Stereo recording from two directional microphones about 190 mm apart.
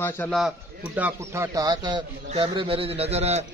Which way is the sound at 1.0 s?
10° right (ahead or behind).